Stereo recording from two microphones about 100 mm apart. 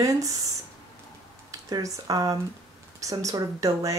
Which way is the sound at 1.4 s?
35° right (ahead or behind).